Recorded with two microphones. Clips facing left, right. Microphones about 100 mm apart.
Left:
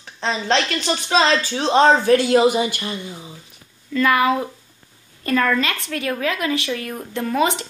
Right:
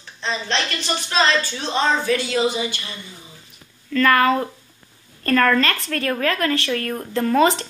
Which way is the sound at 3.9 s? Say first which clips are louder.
Right 1 dB; 10° left (ahead or behind).